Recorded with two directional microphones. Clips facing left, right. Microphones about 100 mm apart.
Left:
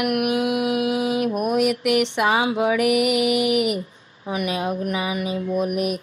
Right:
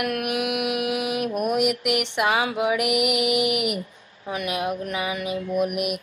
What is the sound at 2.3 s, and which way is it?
Speech, 25° left (ahead or behind).